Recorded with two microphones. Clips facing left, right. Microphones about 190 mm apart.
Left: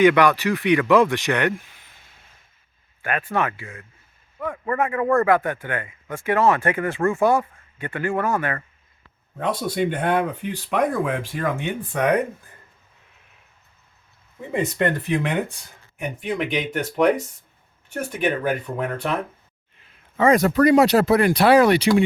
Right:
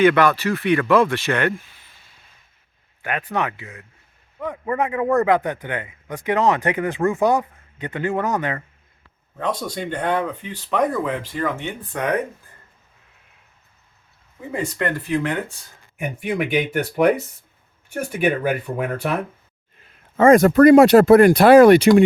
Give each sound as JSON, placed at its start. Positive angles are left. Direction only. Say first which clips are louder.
{"t": 0.0, "sound": "speech", "louder": "even", "side_deg": 15}
{"t": 3.0, "sound": "speech", "louder": "even", "side_deg": -15}
{"t": 9.4, "sound": "speech", "louder": "left 3 dB", "side_deg": 10}
{"t": 14.5, "sound": "speech", "louder": "left 2 dB", "side_deg": 20}
{"t": 16.0, "sound": "speech", "louder": "right 2 dB", "side_deg": -10}
{"t": 20.1, "sound": "speech", "louder": "right 5 dB", "side_deg": -50}